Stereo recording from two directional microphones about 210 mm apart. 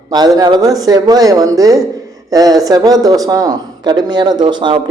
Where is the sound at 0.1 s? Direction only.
20° right (ahead or behind).